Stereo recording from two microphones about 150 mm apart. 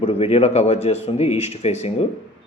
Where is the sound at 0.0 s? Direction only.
40° left (ahead or behind).